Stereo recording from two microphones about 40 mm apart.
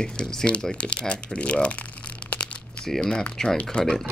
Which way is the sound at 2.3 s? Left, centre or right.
Left.